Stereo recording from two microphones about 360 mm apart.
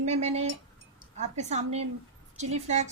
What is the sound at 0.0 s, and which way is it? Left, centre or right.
A woman's voice, centre.